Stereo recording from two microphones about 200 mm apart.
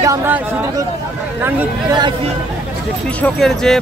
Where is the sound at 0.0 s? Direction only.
15° right (ahead or behind).